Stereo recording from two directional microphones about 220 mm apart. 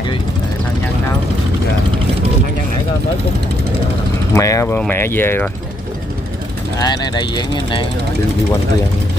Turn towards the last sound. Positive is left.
turn(degrees=20)  # may be behind; listen again after turning